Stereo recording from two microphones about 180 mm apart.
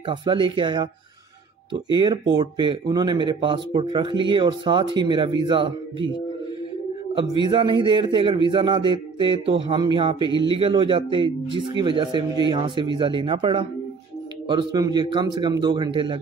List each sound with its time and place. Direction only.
0.0 s speech: 25° right (ahead or behind)
1.9 s speech: 25° right (ahead or behind)
7.2 s speech: 25° right (ahead or behind)